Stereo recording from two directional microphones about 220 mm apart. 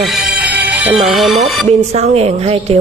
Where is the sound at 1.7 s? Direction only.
30° right (ahead or behind).